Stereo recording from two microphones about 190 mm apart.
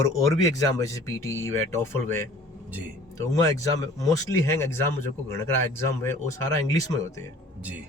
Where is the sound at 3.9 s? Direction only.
15° left (ahead or behind).